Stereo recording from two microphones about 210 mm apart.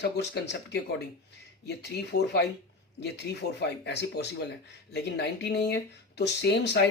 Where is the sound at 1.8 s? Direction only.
50° left (ahead or behind).